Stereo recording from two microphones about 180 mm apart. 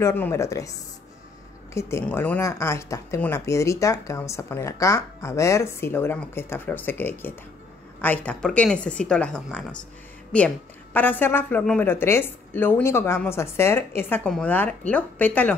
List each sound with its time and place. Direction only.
0.0 s speech: 15° left (ahead or behind)
1.7 s speech: 15° left (ahead or behind)